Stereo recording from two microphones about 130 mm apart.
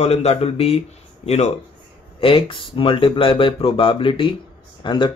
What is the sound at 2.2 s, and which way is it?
Speech, 45° left (ahead or behind).